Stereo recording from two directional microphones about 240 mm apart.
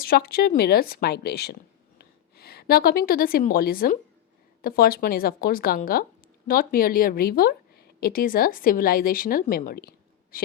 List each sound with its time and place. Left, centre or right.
0.0 s a woman's voice: left